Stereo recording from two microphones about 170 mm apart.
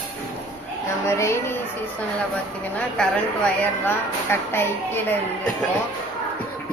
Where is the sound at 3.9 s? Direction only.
15° left (ahead or behind).